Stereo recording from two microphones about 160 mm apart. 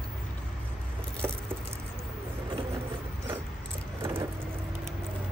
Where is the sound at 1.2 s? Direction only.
15° right (ahead or behind).